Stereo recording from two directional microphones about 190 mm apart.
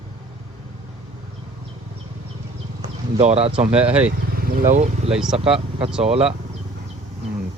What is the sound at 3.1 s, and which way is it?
Speech, 35° right (ahead or behind).